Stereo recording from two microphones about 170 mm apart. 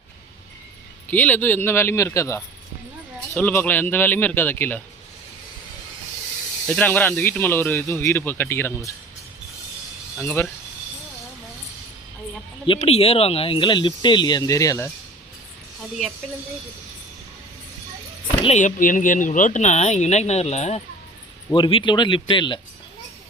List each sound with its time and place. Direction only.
1.1 s speech: 10° left (ahead or behind)
6.7 s speech: 10° left (ahead or behind)
10.2 s speech: 10° left (ahead or behind)
12.6 s speech: 35° left (ahead or behind); by 14.9 s 15° left (ahead or behind)
18.4 s speech: 45° left (ahead or behind)
21.5 s speech: 30° left (ahead or behind)